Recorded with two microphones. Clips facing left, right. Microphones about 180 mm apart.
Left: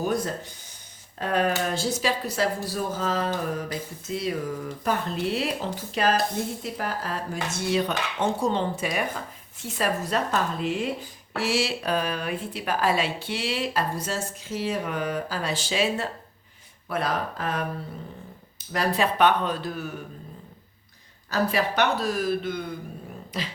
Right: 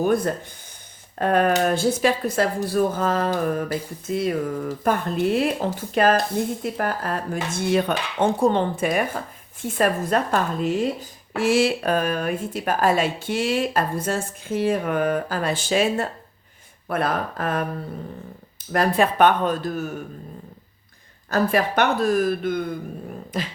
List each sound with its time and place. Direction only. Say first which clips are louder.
0.0 s speech: right 6 dB; 55° right (ahead or behind)
18.7 s speech: right 5 dB; 50° right (ahead or behind)
21.2 s speech: right 4 dB; 50° right (ahead or behind)